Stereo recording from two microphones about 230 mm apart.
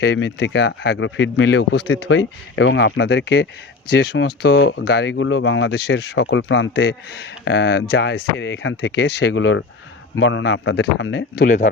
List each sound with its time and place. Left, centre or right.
0.0 s speech: left